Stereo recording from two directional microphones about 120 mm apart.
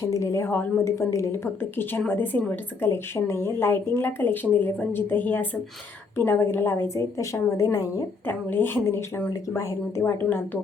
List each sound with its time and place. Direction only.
0.1 s speech: 25° left (ahead or behind)
8.3 s speech: 15° left (ahead or behind)